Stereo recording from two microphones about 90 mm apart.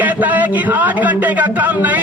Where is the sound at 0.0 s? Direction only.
20° right (ahead or behind).